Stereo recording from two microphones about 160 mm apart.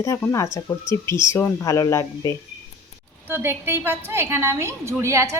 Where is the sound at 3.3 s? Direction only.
15° right (ahead or behind).